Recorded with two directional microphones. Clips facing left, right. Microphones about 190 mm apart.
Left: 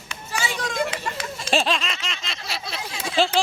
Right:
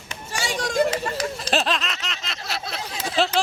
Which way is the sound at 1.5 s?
Centre (ahead or behind).